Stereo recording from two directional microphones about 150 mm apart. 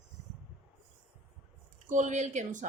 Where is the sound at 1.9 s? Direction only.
55° right (ahead or behind).